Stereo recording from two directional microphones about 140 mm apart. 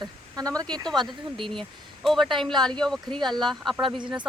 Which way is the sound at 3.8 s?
35° right (ahead or behind).